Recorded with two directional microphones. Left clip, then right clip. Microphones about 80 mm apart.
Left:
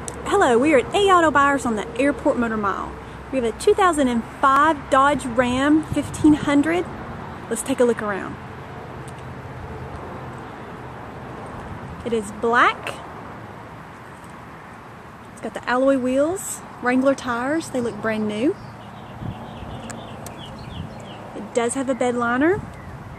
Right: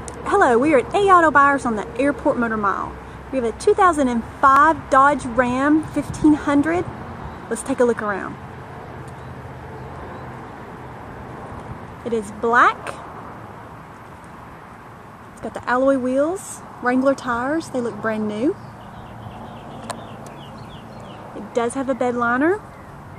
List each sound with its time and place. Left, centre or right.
0.0 s speech: centre
12.0 s speech: centre
15.4 s speech: centre
21.5 s speech: centre